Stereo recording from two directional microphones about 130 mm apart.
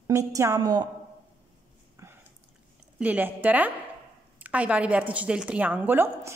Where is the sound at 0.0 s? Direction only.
25° right (ahead or behind).